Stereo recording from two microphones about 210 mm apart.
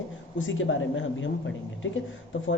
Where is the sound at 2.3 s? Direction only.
65° left (ahead or behind).